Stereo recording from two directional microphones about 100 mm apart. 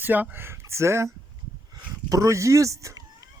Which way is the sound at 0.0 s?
15° right (ahead or behind).